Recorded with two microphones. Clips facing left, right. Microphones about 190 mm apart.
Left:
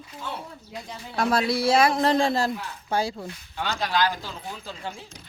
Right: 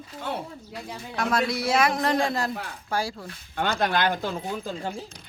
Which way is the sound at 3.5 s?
55° right (ahead or behind).